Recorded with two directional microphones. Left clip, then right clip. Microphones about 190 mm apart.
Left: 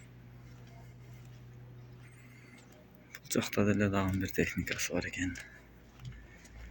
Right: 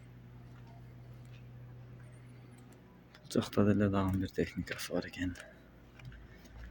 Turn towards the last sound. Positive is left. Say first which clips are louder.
# left 3 dB
turn(degrees=-15)  # may be behind; listen again after turning